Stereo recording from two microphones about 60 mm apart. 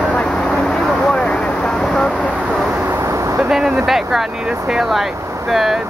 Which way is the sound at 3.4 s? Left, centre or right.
Centre.